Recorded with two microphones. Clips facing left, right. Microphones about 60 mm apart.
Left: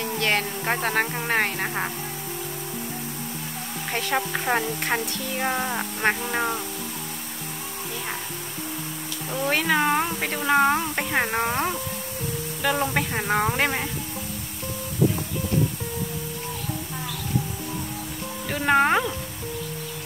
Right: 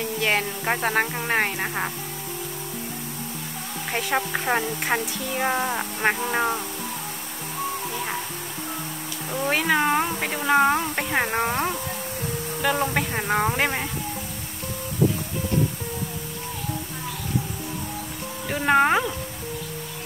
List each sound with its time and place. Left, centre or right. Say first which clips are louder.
0.2 s speech: right 1 dB; centre
3.9 s speech: right 1 dB; centre
9.3 s speech: right 1 dB; centre
18.5 s speech: right 1 dB; centre